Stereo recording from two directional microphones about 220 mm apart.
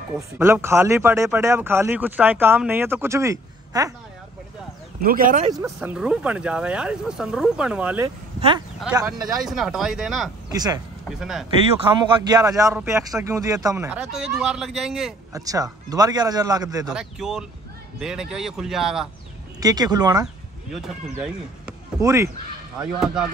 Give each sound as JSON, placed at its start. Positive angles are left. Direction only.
{"t": 0.4, "sound": "speech", "side_deg": -10}
{"t": 5.0, "sound": "speech", "side_deg": -40}
{"t": 5.5, "sound": "speech", "side_deg": -10}
{"t": 8.4, "sound": "speech", "side_deg": -25}
{"t": 9.4, "sound": "speech", "side_deg": 0}
{"t": 10.5, "sound": "speech", "side_deg": -15}
{"t": 11.1, "sound": "speech", "side_deg": 0}
{"t": 12.2, "sound": "speech", "side_deg": -15}
{"t": 15.3, "sound": "speech", "side_deg": -15}
{"t": 16.8, "sound": "speech", "side_deg": -5}
{"t": 19.6, "sound": "speech", "side_deg": -15}
{"t": 20.7, "sound": "speech", "side_deg": -5}